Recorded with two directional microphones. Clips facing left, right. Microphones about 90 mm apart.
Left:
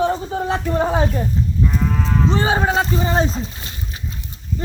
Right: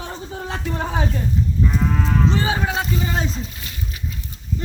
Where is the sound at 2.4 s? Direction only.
35° left (ahead or behind).